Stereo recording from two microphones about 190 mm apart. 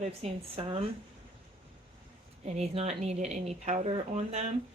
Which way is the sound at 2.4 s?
35° right (ahead or behind).